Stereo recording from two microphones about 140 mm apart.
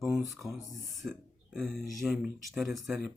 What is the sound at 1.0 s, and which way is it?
Speech, 10° right (ahead or behind).